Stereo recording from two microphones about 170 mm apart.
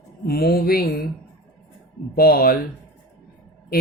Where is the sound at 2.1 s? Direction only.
60° left (ahead or behind).